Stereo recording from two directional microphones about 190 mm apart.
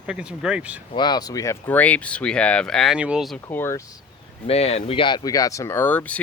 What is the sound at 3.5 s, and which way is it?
Speech, 15° left (ahead or behind).